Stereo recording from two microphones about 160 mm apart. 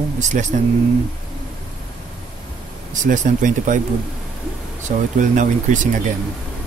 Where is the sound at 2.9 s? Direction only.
50° right (ahead or behind).